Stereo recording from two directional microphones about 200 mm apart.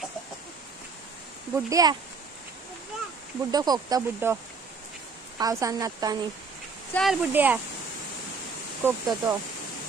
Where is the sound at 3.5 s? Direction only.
20° right (ahead or behind).